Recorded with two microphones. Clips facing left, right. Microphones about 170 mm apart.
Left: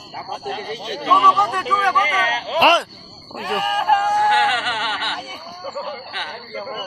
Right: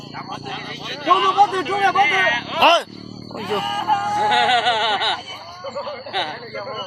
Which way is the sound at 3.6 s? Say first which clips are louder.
Left 7 dB; 65° left (ahead or behind).